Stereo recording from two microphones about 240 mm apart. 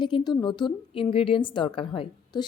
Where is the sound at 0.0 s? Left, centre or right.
Centre.